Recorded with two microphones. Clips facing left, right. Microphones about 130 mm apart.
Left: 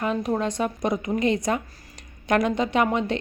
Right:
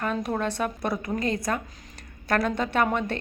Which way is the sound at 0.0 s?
10° left (ahead or behind).